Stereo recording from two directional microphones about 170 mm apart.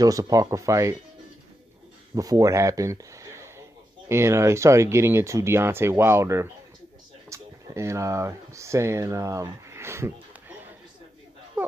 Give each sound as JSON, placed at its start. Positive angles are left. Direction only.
{"t": 0.0, "sound": "speech", "side_deg": -20}
{"t": 2.1, "sound": "speech", "side_deg": -20}